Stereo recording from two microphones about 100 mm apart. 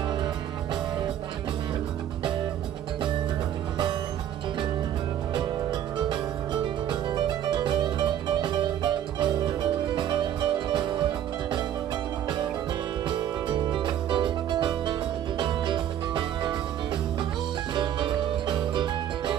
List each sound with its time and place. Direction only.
5.9 s music: 50° right (ahead or behind)
13.5 s music: 50° right (ahead or behind)
17.7 s music: 50° right (ahead or behind)